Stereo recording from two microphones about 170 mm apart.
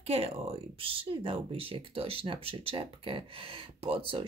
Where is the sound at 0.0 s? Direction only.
35° right (ahead or behind).